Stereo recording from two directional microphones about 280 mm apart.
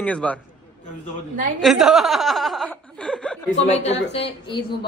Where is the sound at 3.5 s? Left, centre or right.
Left.